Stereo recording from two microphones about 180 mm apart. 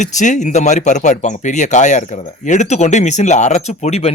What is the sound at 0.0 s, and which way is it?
Speech, 40° left (ahead or behind).